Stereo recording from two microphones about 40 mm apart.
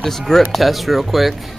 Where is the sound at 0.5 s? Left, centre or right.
Centre.